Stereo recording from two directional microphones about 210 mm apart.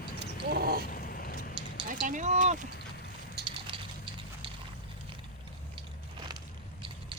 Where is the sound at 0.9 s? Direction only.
40° left (ahead or behind).